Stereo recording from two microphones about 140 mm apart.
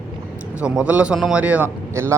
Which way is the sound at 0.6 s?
10° right (ahead or behind).